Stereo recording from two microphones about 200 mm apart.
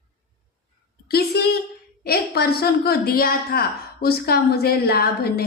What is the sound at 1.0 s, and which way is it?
A woman's voice, 50° left (ahead or behind).